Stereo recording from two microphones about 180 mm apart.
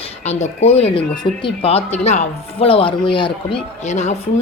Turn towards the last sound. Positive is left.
turn(degrees=40)  # may be behind; listen again after turning